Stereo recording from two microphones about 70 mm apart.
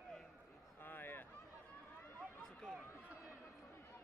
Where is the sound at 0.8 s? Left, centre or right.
Left.